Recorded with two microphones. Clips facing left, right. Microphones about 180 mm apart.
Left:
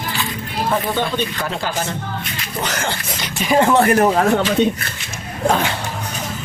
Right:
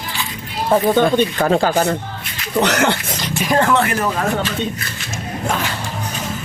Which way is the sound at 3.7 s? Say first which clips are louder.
Left 4 dB; 40° left (ahead or behind).